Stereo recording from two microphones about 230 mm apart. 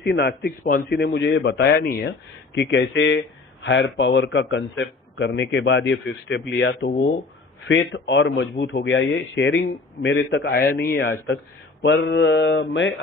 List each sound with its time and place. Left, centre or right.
0.0 s a man's voice: left
10.0 s a man's voice: left